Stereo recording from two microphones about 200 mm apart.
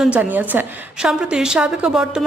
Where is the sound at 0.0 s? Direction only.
5° right (ahead or behind).